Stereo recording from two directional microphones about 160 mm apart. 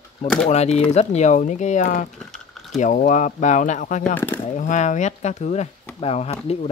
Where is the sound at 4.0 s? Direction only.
10° left (ahead or behind).